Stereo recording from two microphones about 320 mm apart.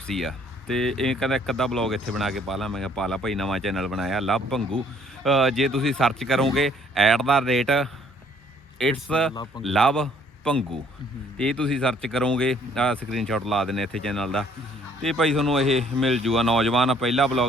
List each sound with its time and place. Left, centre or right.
0.1 s speech: centre